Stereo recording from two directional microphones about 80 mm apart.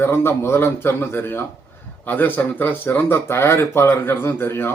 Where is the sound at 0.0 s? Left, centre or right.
Left.